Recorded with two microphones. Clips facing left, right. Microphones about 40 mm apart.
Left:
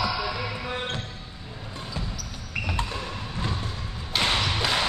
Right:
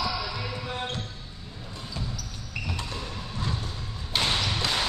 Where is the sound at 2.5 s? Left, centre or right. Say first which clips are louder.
Left 5 dB; left.